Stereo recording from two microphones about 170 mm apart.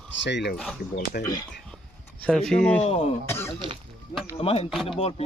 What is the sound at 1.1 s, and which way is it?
Speech, 65° left (ahead or behind).